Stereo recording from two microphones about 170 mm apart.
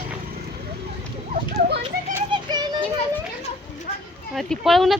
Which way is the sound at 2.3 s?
25° right (ahead or behind).